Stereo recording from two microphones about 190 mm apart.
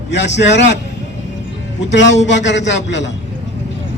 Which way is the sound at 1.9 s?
70° left (ahead or behind).